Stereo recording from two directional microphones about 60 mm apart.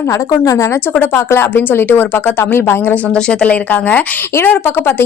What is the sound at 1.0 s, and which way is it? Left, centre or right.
Speech, left.